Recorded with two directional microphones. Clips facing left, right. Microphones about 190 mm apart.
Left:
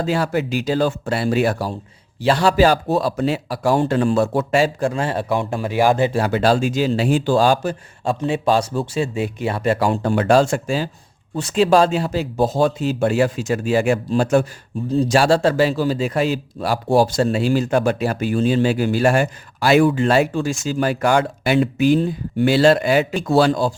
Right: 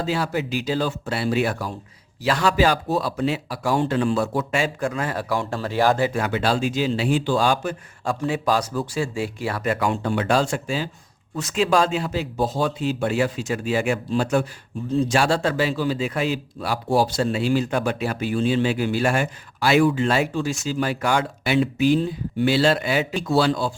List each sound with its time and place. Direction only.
0.0 s a man's voice: 50° left (ahead or behind); by 6.1 s 15° left (ahead or behind)
6.1 s speech: 35° left (ahead or behind)
8.0 s speech: 25° left (ahead or behind); by 10.8 s 45° left (ahead or behind)
11.3 s a man's voice: 30° left (ahead or behind)